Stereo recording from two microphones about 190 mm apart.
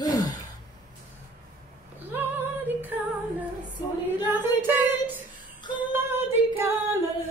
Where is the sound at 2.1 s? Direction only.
10° right (ahead or behind).